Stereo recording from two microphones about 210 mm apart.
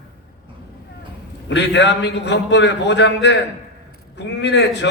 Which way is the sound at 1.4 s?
55° left (ahead or behind).